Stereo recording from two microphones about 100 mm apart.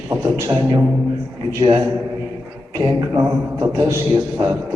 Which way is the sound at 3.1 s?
35° right (ahead or behind).